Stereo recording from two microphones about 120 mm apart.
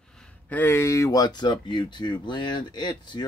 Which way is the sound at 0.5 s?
20° left (ahead or behind).